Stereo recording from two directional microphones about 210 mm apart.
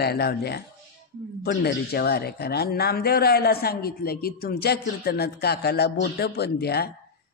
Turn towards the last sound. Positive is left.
turn(degrees=50)  # may be behind; listen again after turning